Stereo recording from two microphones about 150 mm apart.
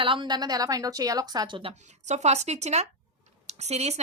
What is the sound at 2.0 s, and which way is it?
Speech, 50° right (ahead or behind).